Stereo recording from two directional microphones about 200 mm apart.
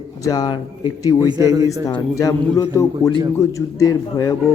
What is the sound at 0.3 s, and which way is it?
Speech, 20° left (ahead or behind).